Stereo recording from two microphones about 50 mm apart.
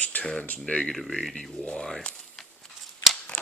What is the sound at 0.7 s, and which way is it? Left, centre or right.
Speech, centre.